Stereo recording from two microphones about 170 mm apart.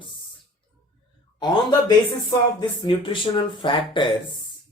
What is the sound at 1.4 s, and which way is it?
Speech, 25° left (ahead or behind).